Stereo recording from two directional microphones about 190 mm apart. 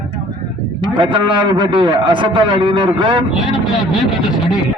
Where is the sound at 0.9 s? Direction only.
25° right (ahead or behind).